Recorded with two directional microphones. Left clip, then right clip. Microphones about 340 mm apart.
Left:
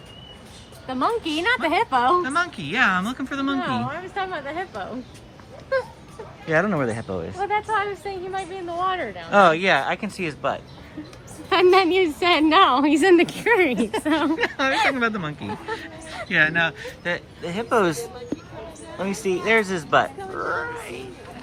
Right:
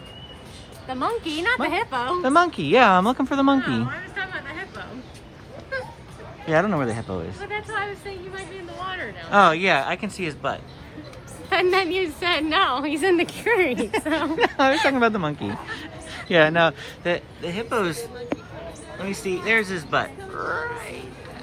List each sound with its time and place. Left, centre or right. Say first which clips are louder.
0.9 s a woman's voice: left 2 dB; left
2.2 s a woman's voice: right 5 dB; centre
3.6 s speech: left 1 dB; centre
6.5 s speech: even; centre
7.3 s speech: left 8 dB; centre
9.3 s speech: even; centre
11.4 s a woman's voice: left 4 dB; left
14.3 s a woman's voice: right 2 dB; centre
19.2 s speech: left 1 dB; centre